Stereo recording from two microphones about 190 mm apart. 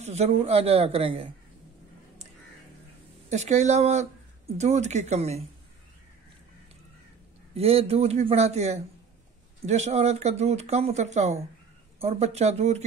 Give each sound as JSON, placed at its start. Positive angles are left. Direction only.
{"t": 0.0, "sound": "speech", "side_deg": -35}
{"t": 3.3, "sound": "speech", "side_deg": -35}
{"t": 7.5, "sound": "speech", "side_deg": -30}